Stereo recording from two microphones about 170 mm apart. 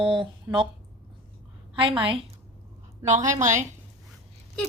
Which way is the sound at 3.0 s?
45° right (ahead or behind).